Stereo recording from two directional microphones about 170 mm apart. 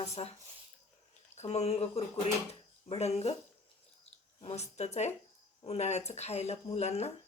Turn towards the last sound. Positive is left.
turn(degrees=40)  # may be behind; listen again after turning